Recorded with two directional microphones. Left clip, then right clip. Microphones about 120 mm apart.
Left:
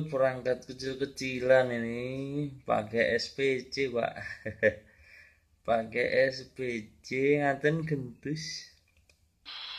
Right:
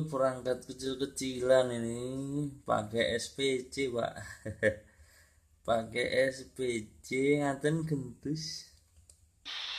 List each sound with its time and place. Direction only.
0.1 s speech: 15° right (ahead or behind)
0.8 s speech: 5° right (ahead or behind)
1.5 s speech: 15° right (ahead or behind)
1.8 s speech: 5° right (ahead or behind)
2.4 s speech: 20° right (ahead or behind)
9.4 s radio: 40° right (ahead or behind)